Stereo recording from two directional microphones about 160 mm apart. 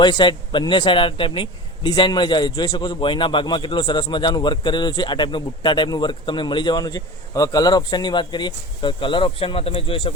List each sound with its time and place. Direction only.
0.0 s a man's voice: 30° left (ahead or behind)